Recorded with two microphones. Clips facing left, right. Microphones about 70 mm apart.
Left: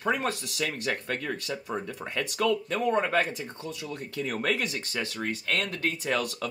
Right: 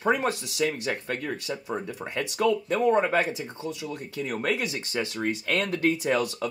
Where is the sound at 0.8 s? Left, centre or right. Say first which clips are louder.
Right 1 dB; centre.